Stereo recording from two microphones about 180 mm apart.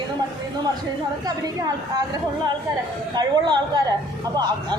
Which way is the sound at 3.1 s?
25° right (ahead or behind).